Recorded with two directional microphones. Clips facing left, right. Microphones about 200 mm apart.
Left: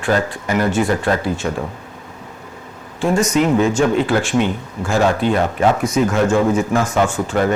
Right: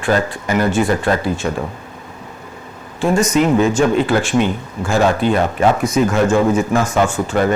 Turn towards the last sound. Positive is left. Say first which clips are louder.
# right 1 dB
turn(degrees=-15)  # may be behind; listen again after turning